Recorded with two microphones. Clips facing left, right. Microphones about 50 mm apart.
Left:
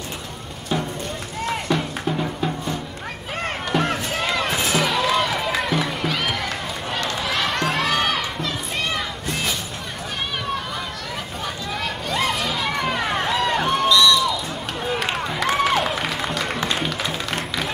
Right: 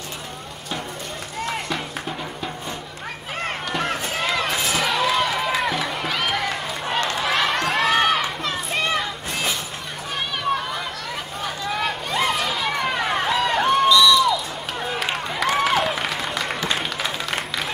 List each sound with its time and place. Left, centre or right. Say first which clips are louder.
1.4 s music: left 4 dB; centre
3.4 s run: left 3 dB; centre
11.8 s a sound: even; centre
16.6 s music: left 1 dB; centre